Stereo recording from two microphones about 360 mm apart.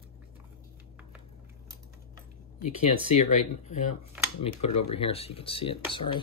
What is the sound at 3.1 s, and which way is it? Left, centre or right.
Speech, centre.